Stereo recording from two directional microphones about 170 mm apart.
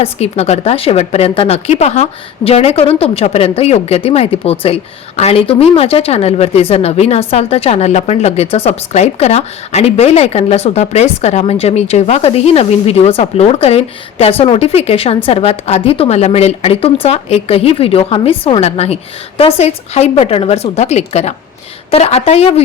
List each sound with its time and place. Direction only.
0.0 s speech: 40° left (ahead or behind)